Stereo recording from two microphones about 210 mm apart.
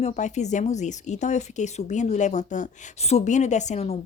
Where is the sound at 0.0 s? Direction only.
35° left (ahead or behind).